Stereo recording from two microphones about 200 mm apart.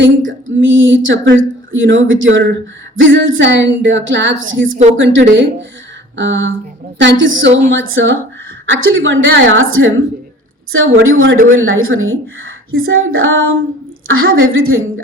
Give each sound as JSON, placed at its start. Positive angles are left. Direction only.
{"t": 0.3, "sound": "a woman's voice", "side_deg": -70}
{"t": 11.5, "sound": "a woman's voice", "side_deg": -90}